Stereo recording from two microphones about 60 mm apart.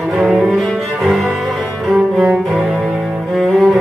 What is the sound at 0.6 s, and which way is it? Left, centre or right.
Cello, centre.